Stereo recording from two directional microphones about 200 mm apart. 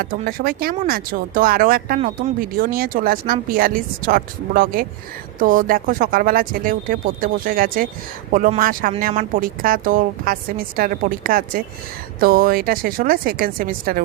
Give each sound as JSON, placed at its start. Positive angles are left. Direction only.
{"t": 0.0, "sound": "a woman's voice", "side_deg": -45}
{"t": 2.0, "sound": "speech", "side_deg": -35}
{"t": 2.4, "sound": "a woman's voice", "side_deg": -45}